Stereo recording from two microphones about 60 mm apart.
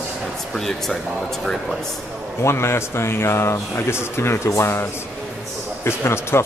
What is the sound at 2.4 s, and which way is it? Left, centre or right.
Speech, left.